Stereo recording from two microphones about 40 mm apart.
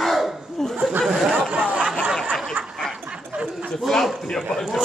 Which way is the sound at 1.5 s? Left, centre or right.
Right.